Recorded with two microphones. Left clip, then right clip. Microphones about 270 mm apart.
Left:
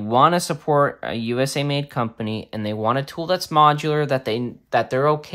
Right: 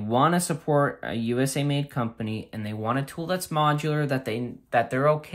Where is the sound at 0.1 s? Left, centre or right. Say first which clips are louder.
Left 6 dB; centre.